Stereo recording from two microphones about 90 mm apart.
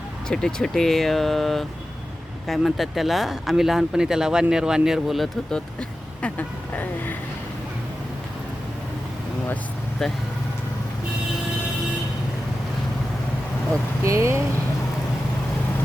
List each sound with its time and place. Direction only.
0.3 s speech: 5° left (ahead or behind)
6.2 s speech: 20° left (ahead or behind)
10.0 s speech: 5° left (ahead or behind)
14.0 s speech: 35° right (ahead or behind)